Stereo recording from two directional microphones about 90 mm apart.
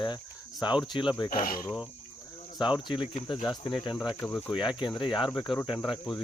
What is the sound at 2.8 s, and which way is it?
Cricket, 65° left (ahead or behind).